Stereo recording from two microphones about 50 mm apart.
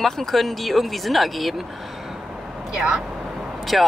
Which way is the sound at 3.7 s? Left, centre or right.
Centre.